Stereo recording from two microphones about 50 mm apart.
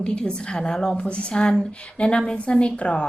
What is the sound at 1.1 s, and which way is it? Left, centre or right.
A woman's voice, left.